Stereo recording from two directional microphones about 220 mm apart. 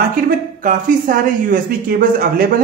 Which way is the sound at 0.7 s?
40° right (ahead or behind).